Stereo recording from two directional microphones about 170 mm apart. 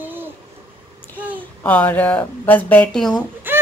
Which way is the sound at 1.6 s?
10° left (ahead or behind).